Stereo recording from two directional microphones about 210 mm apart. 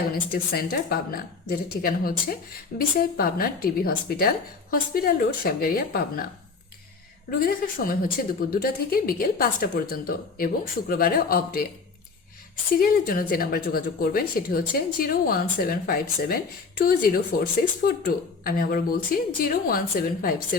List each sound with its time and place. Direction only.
0.3 s speech: 45° left (ahead or behind)
7.3 s speech: 40° left (ahead or behind)
12.8 s speech: 45° left (ahead or behind)